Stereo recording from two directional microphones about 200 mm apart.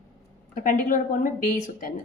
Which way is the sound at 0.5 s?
40° left (ahead or behind).